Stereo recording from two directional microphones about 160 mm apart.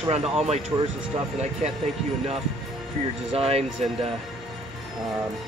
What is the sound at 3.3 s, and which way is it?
Speech, 35° right (ahead or behind).